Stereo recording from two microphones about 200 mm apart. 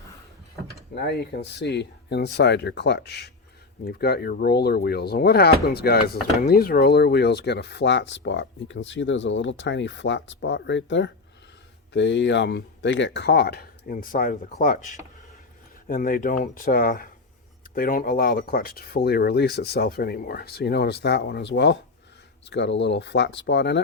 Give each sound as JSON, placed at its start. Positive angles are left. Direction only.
{"t": 0.9, "sound": "speech", "side_deg": 55}
{"t": 15.9, "sound": "speech", "side_deg": 45}